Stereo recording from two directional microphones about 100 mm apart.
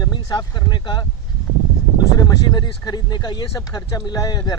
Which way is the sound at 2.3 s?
45° left (ahead or behind).